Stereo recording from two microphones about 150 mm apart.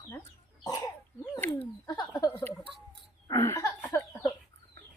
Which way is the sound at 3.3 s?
20° left (ahead or behind).